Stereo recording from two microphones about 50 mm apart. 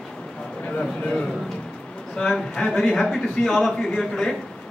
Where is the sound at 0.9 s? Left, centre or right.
Centre.